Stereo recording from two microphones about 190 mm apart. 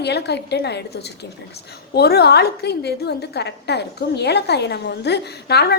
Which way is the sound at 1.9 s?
55° left (ahead or behind).